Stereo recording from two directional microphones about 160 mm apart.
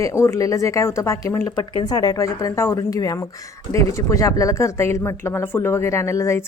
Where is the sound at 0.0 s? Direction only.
20° left (ahead or behind).